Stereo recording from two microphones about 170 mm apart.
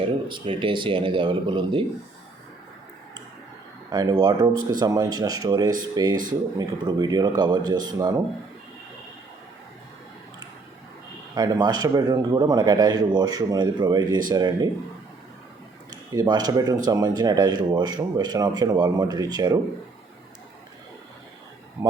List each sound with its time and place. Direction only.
0.3 s speech: 30° right (ahead or behind)
3.8 s speech: 25° right (ahead or behind)
11.3 s speech: 25° right (ahead or behind)
15.9 s speech: 25° right (ahead or behind)
21.8 s speech: 20° right (ahead or behind)